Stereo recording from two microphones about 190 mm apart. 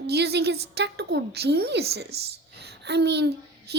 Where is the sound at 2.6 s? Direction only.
60° right (ahead or behind).